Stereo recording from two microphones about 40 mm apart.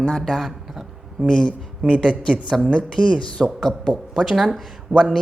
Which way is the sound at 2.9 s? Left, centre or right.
Centre.